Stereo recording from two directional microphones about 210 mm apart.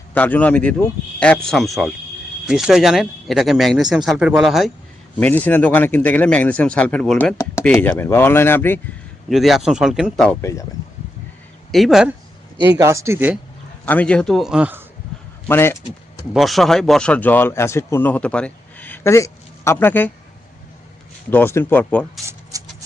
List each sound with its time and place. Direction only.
0.1 s speech: 5° left (ahead or behind)
9.3 s speech: centre (ahead or behind)
10.4 s speech: 15° left (ahead or behind)
11.7 s speech: centre (ahead or behind)
12.7 s speech: 15° right (ahead or behind)
13.8 s speech: 5° left (ahead or behind)
15.4 s speech: 10° left (ahead or behind)
16.3 s speech: centre (ahead or behind)
21.2 s speech: 10° left (ahead or behind)
22.5 s a sound: 15° right (ahead or behind)